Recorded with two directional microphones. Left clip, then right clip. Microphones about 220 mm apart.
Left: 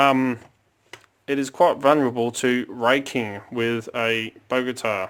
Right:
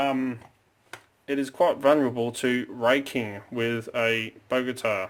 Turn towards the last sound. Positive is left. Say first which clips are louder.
# left 3 dB
turn(degrees=20)  # may be behind; listen again after turning